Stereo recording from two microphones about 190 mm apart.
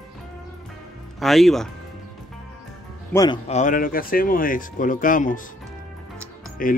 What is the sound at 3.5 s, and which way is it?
Speech, 45° left (ahead or behind).